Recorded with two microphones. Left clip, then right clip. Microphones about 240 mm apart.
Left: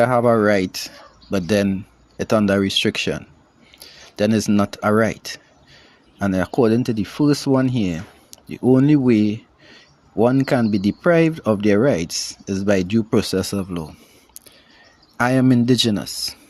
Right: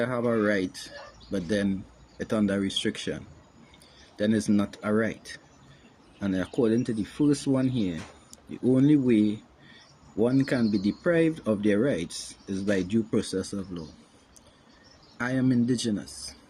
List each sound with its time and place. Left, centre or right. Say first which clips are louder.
0.0 s speech: left 11 dB; left
4.2 s speech: left 8 dB; left
6.1 s speech: left 9 dB; left
15.2 s speech: left 10 dB; left